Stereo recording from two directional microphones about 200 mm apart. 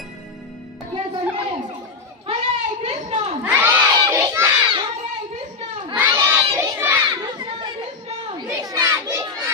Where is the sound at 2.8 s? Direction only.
30° right (ahead or behind).